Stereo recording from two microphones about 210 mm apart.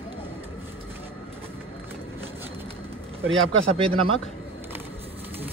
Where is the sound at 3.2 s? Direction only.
65° right (ahead or behind).